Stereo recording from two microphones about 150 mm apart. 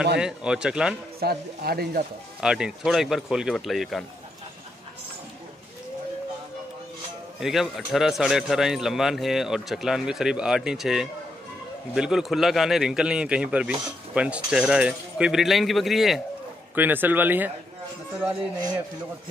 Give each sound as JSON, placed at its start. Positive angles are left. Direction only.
{"t": 0.2, "sound": "a man's voice", "side_deg": -5}
{"t": 1.2, "sound": "speech", "side_deg": -90}
{"t": 2.4, "sound": "a man's voice", "side_deg": -5}
{"t": 7.3, "sound": "a man's voice", "side_deg": 0}
{"t": 16.7, "sound": "a man's voice", "side_deg": -10}